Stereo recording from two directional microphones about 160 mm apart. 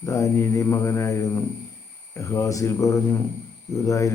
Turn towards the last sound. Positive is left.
turn(degrees=20)  # may be behind; listen again after turning